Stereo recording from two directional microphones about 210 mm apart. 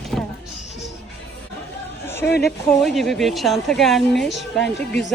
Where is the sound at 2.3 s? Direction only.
50° left (ahead or behind).